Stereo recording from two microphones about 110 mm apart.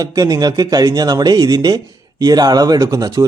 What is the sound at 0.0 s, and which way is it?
Speech, 35° right (ahead or behind).